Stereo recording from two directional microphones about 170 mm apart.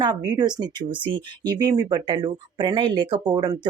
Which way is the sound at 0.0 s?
25° right (ahead or behind).